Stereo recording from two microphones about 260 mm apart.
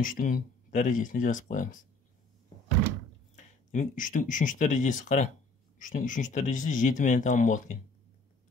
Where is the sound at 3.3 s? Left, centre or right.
Left.